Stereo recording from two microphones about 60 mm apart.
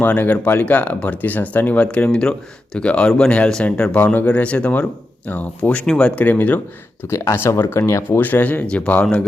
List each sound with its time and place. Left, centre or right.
0.0 s speech: left
5.8 s speech: centre
6.2 s speech: left
7.1 s speech: left
8.2 s speech: left
8.6 s speech: centre